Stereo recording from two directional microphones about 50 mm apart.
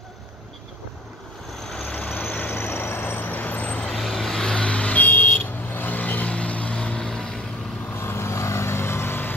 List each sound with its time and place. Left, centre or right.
1.8 s vehicle: left
2.7 s vehicle: left
3.9 s vehicle: centre
4.5 s vehicle: left
5.0 s vehicle: left
7.1 s vehicle: centre
7.9 s vehicle: left